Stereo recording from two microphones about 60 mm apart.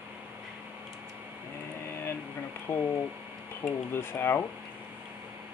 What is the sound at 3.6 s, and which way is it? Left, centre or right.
Speech, left.